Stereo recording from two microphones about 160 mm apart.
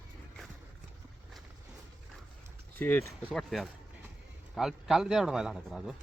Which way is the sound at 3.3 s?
Centre (ahead or behind).